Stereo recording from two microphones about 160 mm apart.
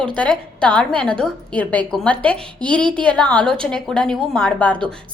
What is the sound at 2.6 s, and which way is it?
Speech, 30° right (ahead or behind).